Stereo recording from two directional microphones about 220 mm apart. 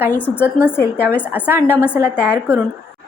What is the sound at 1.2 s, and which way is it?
A woman's voice, 5° right (ahead or behind).